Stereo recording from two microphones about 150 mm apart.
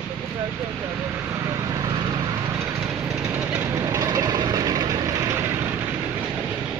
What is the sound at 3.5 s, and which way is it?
Vehicle, 25° right (ahead or behind).